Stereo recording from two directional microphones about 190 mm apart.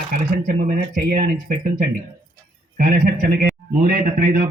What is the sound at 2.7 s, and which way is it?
Speech, 50° right (ahead or behind).